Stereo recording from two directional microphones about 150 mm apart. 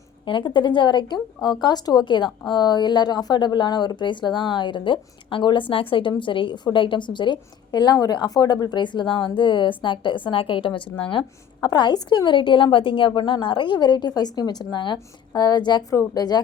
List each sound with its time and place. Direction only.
0.3 s speech: 30° left (ahead or behind)